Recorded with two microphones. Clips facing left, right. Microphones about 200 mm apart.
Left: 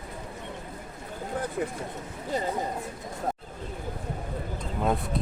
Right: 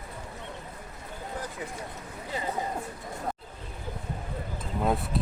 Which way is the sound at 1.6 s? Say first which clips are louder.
Left 8 dB; 45° left (ahead or behind).